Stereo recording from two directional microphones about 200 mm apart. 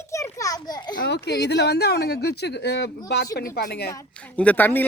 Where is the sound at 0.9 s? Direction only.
55° left (ahead or behind).